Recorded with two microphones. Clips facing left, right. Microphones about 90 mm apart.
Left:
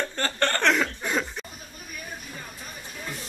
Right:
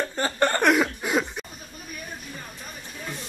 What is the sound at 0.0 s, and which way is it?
Chuckle, 15° right (ahead or behind).